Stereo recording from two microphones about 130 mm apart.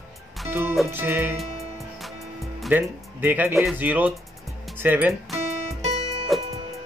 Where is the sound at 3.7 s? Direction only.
15° right (ahead or behind).